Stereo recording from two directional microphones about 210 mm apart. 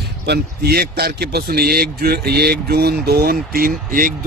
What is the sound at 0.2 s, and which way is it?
Speech, 50° right (ahead or behind).